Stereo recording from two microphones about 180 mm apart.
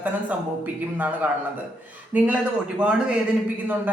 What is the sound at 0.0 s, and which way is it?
A man's voice, 10° right (ahead or behind).